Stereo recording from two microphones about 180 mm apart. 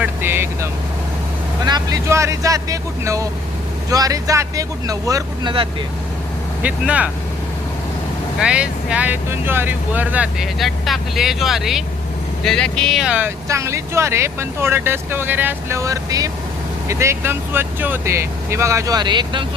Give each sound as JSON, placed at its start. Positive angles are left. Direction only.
{"t": 0.0, "sound": "vehicle", "side_deg": -10}
{"t": 1.6, "sound": "speech", "side_deg": -20}
{"t": 6.6, "sound": "speech", "side_deg": -5}
{"t": 8.4, "sound": "speech", "side_deg": -5}